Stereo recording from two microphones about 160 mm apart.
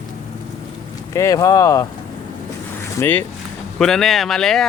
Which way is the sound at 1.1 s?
20° left (ahead or behind).